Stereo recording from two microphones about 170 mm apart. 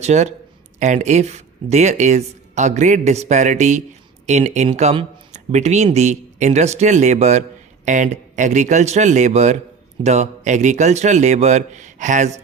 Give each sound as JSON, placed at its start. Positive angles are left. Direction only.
{"t": 0.0, "sound": "speech", "side_deg": -40}